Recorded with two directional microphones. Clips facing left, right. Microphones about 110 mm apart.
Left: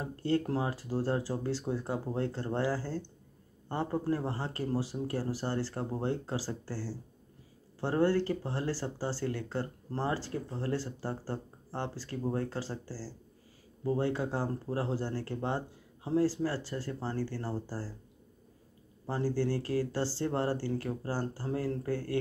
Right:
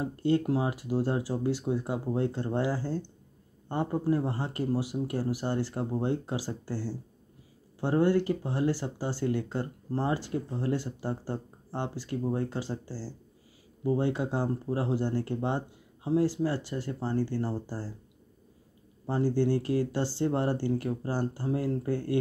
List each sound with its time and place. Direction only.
0.0 s speech: 20° right (ahead or behind)
19.0 s speech: 20° right (ahead or behind)